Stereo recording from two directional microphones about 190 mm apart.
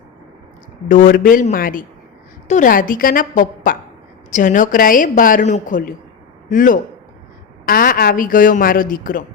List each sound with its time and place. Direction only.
0.9 s a woman's voice: 45° left (ahead or behind)